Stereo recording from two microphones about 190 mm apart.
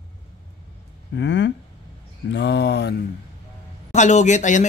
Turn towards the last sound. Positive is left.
turn(degrees=40)  # may be behind; listen again after turning